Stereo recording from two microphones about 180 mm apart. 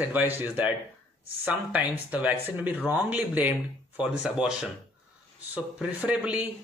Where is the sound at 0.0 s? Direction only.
10° right (ahead or behind).